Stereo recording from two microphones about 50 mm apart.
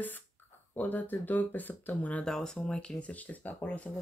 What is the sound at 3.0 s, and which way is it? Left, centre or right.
Speech, left.